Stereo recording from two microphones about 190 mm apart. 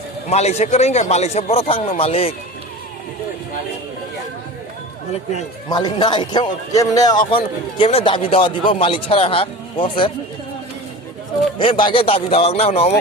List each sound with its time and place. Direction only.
0.3 s a man's voice: 35° left (ahead or behind)
5.6 s a man's voice: 20° left (ahead or behind)
11.6 s a man's voice: 25° left (ahead or behind)